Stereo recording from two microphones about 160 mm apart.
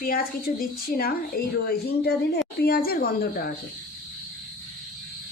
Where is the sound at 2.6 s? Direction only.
65° left (ahead or behind).